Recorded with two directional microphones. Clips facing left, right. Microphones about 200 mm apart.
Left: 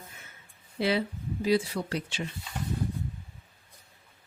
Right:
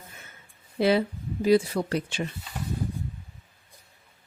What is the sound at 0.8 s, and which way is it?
Speech, 50° right (ahead or behind).